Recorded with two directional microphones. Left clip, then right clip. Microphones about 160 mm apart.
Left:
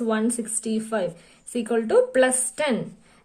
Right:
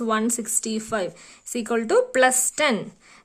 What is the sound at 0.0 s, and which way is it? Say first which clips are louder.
A woman's voice: right 1 dB; 40° right (ahead or behind).